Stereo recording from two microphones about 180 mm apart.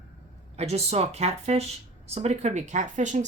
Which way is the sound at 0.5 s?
35° right (ahead or behind).